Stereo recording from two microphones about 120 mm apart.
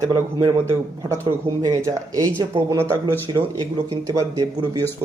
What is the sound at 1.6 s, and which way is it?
Speech, 30° right (ahead or behind).